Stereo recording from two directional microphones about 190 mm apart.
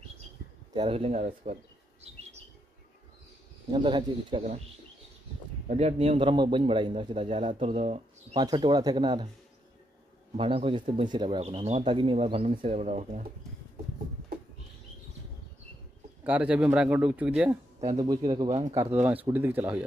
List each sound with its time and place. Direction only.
0.7 s speech: 30° right (ahead or behind)
3.7 s speech: 25° right (ahead or behind)
5.7 s speech: 35° right (ahead or behind)
8.4 s speech: 25° right (ahead or behind)
10.3 s speech: 30° right (ahead or behind)
16.3 s speech: 5° right (ahead or behind)
17.9 s speech: 20° right (ahead or behind)
18.5 s speech: 35° right (ahead or behind)
19.0 s speech: 10° right (ahead or behind)